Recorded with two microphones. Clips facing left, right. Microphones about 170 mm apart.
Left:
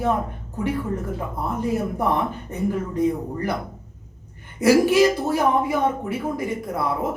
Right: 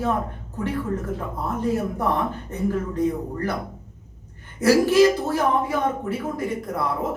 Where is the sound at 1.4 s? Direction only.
10° left (ahead or behind).